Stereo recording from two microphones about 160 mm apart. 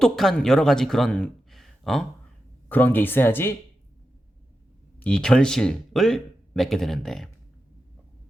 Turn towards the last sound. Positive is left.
turn(degrees=0)  # may be behind; listen again after turning